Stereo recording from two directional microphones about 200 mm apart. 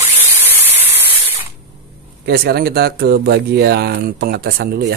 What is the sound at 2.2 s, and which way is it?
Speech, 50° right (ahead or behind).